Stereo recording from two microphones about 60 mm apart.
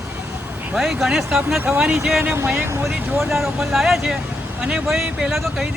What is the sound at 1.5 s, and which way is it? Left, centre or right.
Speech, right.